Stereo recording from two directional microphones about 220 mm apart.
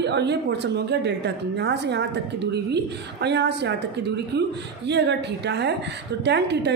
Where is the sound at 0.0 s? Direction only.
50° right (ahead or behind).